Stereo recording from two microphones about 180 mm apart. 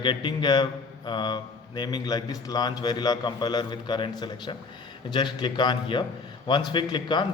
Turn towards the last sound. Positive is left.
turn(degrees=25)  # may be behind; listen again after turning